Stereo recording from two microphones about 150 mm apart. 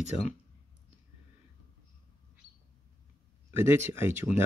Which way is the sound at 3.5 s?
15° right (ahead or behind).